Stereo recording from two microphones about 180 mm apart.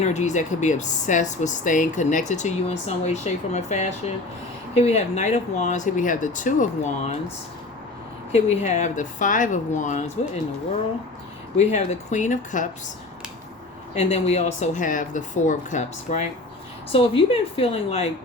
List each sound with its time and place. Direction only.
0.0 s speech: 40° left (ahead or behind)
8.3 s a woman's voice: 40° left (ahead or behind)
11.5 s a woman's voice: 40° left (ahead or behind)
13.9 s speech: 35° left (ahead or behind)
16.9 s speech: 30° left (ahead or behind)